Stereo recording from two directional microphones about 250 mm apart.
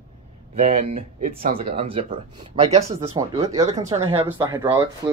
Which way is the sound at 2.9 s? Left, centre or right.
Centre.